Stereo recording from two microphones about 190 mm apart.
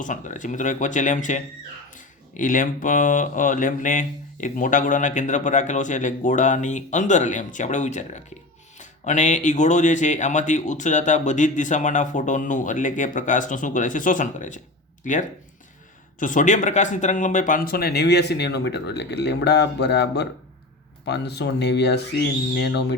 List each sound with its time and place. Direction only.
0.0 s speech: 40° left (ahead or behind)
16.2 s speech: 40° left (ahead or behind); by 23.0 s 60° left (ahead or behind)